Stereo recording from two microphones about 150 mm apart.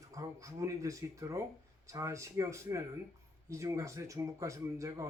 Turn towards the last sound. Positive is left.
turn(degrees=-20)  # may be behind; listen again after turning